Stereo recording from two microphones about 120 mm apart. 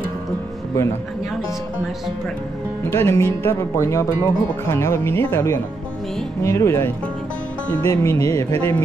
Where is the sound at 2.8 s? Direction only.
20° left (ahead or behind).